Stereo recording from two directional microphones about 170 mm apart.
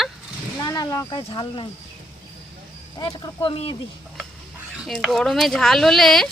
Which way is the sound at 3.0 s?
30° left (ahead or behind).